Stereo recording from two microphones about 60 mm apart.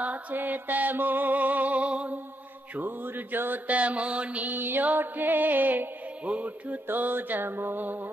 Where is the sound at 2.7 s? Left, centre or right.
Right.